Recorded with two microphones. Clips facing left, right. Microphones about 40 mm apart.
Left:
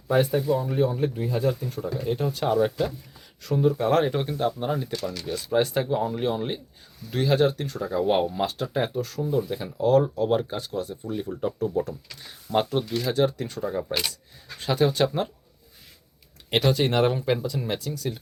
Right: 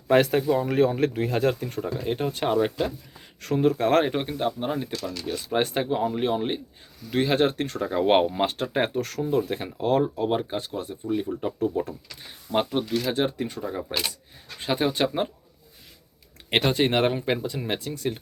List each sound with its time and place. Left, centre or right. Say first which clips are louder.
0.1 s speech: right 2 dB; right
3.4 s speech: right 1 dB; right
4.0 s speech: left 1 dB; right
9.6 s speech: left 8 dB; right
10.2 s speech: left 1 dB; right
16.5 s speech: even; right